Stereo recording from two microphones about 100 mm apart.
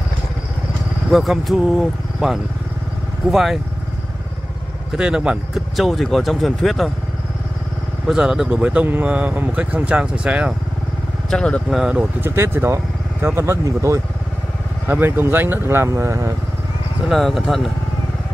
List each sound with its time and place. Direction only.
1.1 s speech: centre (ahead or behind)
4.9 s speech: 10° right (ahead or behind)
8.1 s speech: 5° right (ahead or behind)
11.2 s speech: 10° left (ahead or behind)
11.7 s speech: 10° right (ahead or behind)
12.2 s speech: 25° right (ahead or behind)
14.9 s speech: 20° right (ahead or behind)
17.0 s speech: centre (ahead or behind)